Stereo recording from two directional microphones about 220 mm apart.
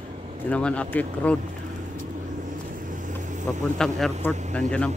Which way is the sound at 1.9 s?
35° right (ahead or behind).